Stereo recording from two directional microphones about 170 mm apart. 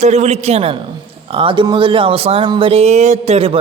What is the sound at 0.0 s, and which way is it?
A man's voice, 40° right (ahead or behind).